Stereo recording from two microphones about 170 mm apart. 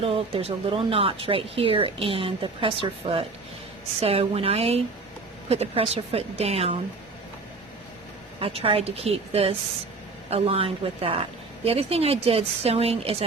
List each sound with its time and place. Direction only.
0.0 s speech: 35° right (ahead or behind)
8.4 s speech: 35° right (ahead or behind)